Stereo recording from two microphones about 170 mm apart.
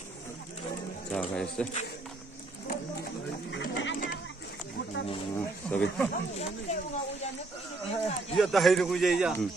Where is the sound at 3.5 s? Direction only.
90° left.